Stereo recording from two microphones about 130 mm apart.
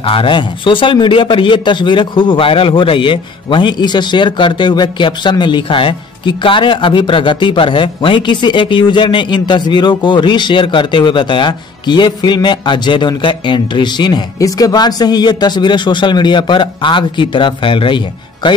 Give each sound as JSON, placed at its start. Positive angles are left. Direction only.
{"t": 0.0, "sound": "a man's voice", "side_deg": 40}